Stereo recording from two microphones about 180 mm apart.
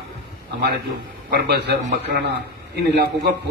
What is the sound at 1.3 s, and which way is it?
Speech, 65° right (ahead or behind).